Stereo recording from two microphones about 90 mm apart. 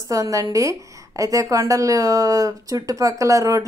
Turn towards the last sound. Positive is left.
turn(degrees=-40)  # may be behind; listen again after turning